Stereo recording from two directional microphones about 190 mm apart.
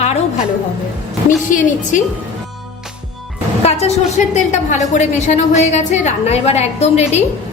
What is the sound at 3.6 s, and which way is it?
A woman's voice, 35° left (ahead or behind).